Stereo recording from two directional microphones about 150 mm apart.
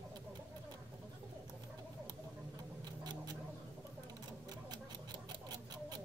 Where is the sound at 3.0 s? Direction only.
30° right (ahead or behind).